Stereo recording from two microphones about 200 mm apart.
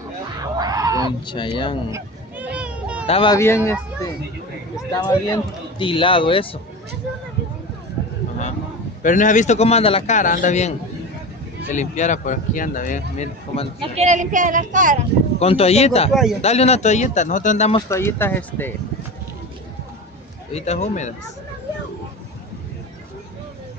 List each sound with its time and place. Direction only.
0.6 s a sound: 20° right (ahead or behind)
1.2 s speech: 25° left (ahead or behind)
1.9 s a sound: 10° right (ahead or behind)
3.1 s speech: 25° left (ahead or behind)
3.3 s speech: 15° left (ahead or behind)
4.9 s speech: 20° left (ahead or behind)
9.0 s speech: 40° left (ahead or behind)
11.7 s speech: 35° left (ahead or behind)
13.7 s speech: 35° right (ahead or behind)
15.3 s speech: 30° left (ahead or behind)
16.1 s a man's voice: centre (ahead or behind)
16.3 s speech: 30° left (ahead or behind)
17.8 s speech: 15° left (ahead or behind)
20.5 s speech: 35° left (ahead or behind)